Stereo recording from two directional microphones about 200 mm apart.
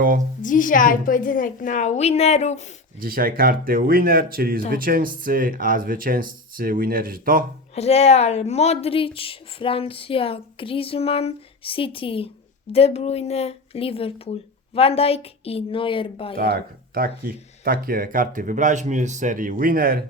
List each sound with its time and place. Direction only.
0.4 s a woman's voice: 40° left (ahead or behind)
3.0 s speech: 45° right (ahead or behind)
7.8 s a woman's voice: 30° left (ahead or behind)
16.4 s speech: 45° right (ahead or behind)